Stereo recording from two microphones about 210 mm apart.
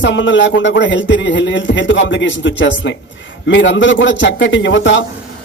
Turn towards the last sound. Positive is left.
turn(degrees=60)  # may be behind; listen again after turning